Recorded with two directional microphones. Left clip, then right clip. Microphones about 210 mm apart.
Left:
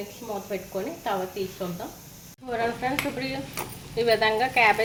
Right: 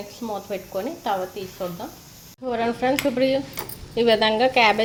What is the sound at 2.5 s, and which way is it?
Speech, 35° right (ahead or behind).